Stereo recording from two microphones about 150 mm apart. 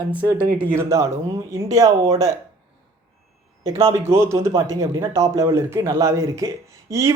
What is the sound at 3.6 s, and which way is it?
Speech, 20° right (ahead or behind).